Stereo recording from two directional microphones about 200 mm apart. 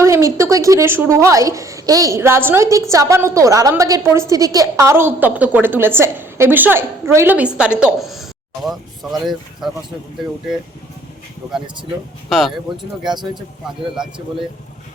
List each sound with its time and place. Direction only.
0.0 s a woman's voice: 15° right (ahead or behind)
12.3 s speech: centre (ahead or behind)
13.0 s speech: 20° right (ahead or behind)
13.9 s speech: 5° right (ahead or behind)